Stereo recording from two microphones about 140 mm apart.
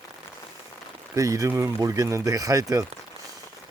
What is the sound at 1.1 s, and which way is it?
Speech, 25° right (ahead or behind).